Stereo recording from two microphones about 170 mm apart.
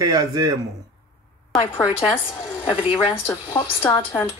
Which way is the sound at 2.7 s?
30° left (ahead or behind).